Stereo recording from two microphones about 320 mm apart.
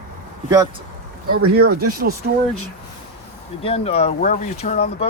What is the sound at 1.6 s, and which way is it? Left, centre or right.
Speech, right.